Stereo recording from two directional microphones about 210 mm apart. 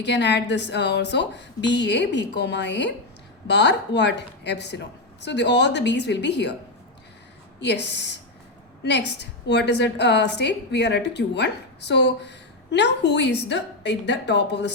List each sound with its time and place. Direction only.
0.0 s a woman's voice: 55° left (ahead or behind)
7.6 s a woman's voice: 55° left (ahead or behind)